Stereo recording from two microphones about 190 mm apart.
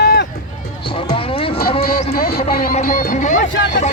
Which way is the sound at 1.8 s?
50° left (ahead or behind).